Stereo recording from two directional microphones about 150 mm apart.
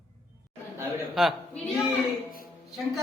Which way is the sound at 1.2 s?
Centre (ahead or behind).